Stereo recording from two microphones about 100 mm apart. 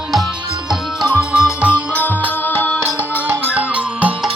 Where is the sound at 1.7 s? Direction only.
15° left (ahead or behind).